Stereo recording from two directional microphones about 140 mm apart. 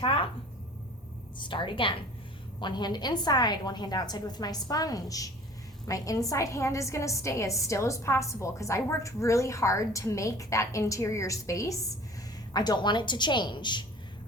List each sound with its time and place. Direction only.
0.0 s a woman's voice: 35° left (ahead or behind)
1.4 s a woman's voice: 35° left (ahead or behind)